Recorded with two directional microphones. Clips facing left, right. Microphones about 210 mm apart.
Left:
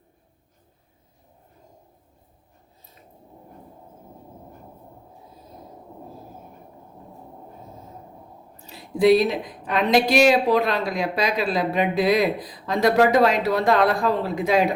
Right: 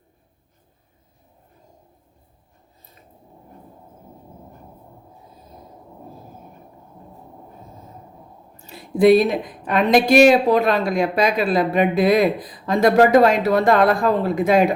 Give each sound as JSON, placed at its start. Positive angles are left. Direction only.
{"t": 8.6, "sound": "a woman's voice", "side_deg": -50}